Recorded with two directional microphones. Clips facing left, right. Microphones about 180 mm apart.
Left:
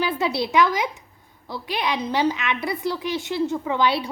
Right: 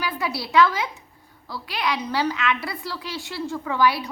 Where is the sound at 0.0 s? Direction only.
25° left (ahead or behind).